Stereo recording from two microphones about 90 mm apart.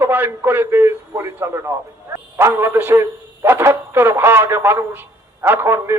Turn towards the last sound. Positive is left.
turn(degrees=-25)  # may be behind; listen again after turning